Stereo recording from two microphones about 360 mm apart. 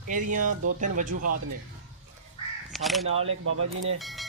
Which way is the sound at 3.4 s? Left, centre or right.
Right.